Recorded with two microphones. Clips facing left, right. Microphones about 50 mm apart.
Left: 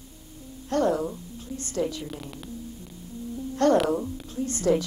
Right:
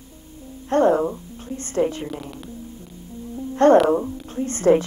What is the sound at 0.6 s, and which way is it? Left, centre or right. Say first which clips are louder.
A woman's voice: right 7 dB; right.